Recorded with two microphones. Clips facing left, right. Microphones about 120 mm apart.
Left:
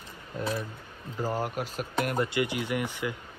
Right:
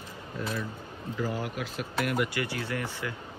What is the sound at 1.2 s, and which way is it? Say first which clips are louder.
Speech: left 2 dB; 45° left (ahead or behind).